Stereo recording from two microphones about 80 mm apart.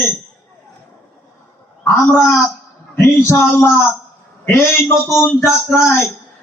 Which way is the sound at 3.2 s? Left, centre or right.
Left.